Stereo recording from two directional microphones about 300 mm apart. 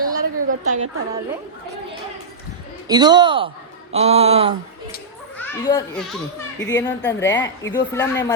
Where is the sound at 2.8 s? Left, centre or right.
Centre.